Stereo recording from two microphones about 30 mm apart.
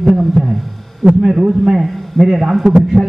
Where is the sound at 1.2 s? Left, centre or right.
Centre.